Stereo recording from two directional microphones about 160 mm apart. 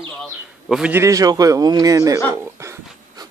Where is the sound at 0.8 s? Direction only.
15° right (ahead or behind).